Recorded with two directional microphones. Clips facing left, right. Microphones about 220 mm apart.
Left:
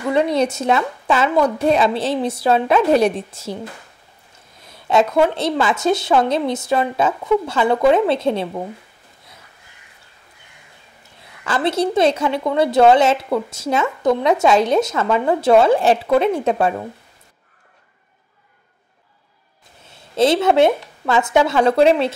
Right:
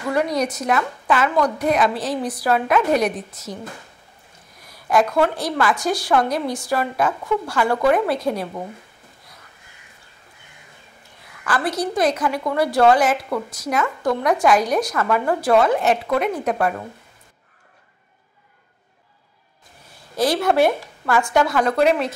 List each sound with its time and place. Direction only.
0.1 s a woman's voice: 25° left (ahead or behind)
4.6 s a woman's voice: 25° left (ahead or behind)
11.4 s a woman's voice: 25° left (ahead or behind)
19.9 s speech: 25° left (ahead or behind)